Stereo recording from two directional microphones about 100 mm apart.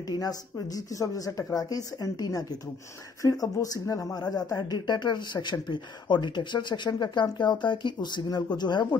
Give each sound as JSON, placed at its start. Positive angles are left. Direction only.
{"t": 0.1, "sound": "speech", "side_deg": 40}